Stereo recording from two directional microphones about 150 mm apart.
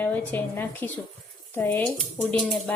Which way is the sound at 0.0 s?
10° left (ahead or behind).